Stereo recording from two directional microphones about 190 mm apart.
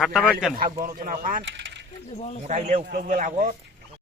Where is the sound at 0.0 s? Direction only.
Centre (ahead or behind).